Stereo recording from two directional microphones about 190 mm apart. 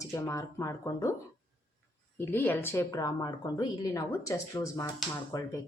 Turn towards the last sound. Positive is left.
turn(degrees=15)  # may be behind; listen again after turning